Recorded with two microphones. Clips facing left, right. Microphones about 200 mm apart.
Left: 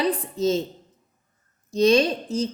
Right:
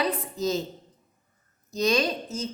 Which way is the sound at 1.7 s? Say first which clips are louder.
Left 6 dB; 30° left (ahead or behind).